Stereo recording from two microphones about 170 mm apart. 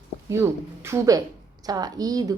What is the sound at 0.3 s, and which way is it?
A woman's voice, 15° right (ahead or behind).